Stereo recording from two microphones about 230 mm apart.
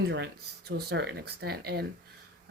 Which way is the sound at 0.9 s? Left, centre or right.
Right.